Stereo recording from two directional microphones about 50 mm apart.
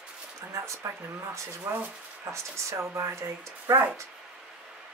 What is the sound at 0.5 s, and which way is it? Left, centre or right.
Speech, right.